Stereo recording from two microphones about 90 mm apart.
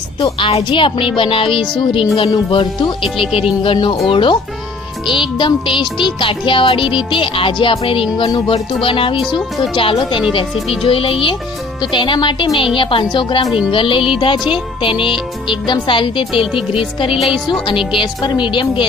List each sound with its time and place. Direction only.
0.2 s speech: 80° left
5.4 s speech: 65° left (ahead or behind)
10.7 s speech: 90° left
11.8 s speech: 65° left (ahead or behind)
16.7 s speech: 80° left
17.2 s a woman's voice: centre (ahead or behind)
17.7 s speech: 65° left (ahead or behind)